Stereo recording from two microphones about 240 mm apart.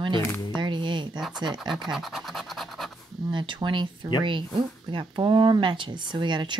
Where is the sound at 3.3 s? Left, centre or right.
Centre.